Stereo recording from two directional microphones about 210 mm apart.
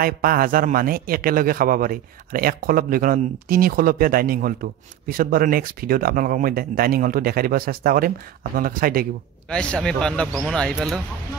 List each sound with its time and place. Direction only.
0.0 s a man's voice: 45° right (ahead or behind)
9.5 s a man's voice: 5° left (ahead or behind)